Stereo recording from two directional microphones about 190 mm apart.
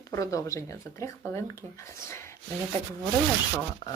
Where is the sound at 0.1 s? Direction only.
15° left (ahead or behind).